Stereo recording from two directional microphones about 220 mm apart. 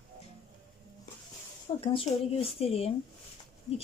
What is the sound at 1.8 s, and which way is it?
Speech, 25° left (ahead or behind).